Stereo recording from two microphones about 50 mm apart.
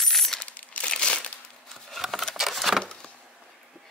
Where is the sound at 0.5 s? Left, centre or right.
Left.